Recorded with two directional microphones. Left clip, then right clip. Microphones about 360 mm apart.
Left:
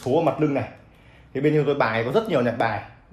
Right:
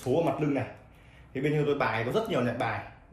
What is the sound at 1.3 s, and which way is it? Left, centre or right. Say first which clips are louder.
Speech: left 7 dB; left.